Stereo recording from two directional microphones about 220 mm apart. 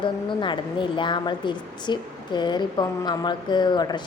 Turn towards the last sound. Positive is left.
turn(degrees=20)  # may be behind; listen again after turning